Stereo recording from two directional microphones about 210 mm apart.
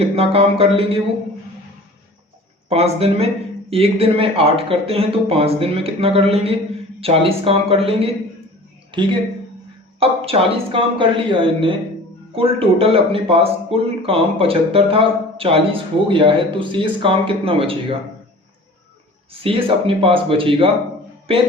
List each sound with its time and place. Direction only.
0.0 s speech: 30° right (ahead or behind)
2.6 s a woman's voice: 30° right (ahead or behind)
19.3 s speech: 25° right (ahead or behind)